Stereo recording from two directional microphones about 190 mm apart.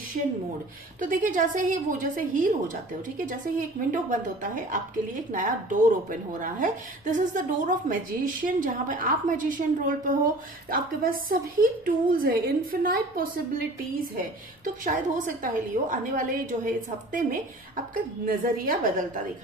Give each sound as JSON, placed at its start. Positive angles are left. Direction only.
{"t": 1.0, "sound": "a woman's voice", "side_deg": -45}